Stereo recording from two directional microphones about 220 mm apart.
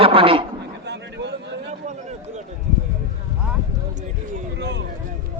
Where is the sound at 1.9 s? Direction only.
30° right (ahead or behind).